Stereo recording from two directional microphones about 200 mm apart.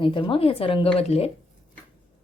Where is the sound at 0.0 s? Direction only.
25° left (ahead or behind).